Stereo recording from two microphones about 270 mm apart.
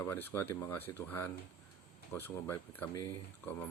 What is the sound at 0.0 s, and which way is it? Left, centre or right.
Speech, centre.